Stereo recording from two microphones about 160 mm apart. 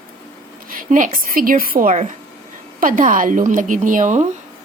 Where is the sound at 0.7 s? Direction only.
55° right (ahead or behind).